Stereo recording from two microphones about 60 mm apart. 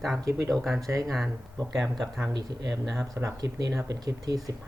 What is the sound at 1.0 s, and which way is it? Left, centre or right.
Speech, centre.